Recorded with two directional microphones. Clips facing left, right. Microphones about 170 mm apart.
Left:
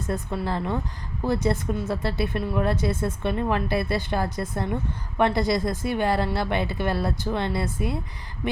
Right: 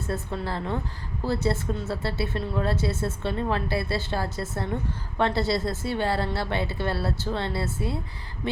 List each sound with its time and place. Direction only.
0.0 s speech: 15° left (ahead or behind)